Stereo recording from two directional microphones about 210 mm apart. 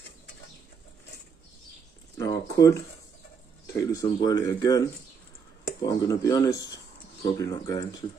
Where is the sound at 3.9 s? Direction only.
15° left (ahead or behind).